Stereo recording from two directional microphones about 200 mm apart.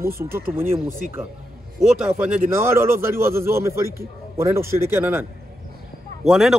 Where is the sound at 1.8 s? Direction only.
5° right (ahead or behind).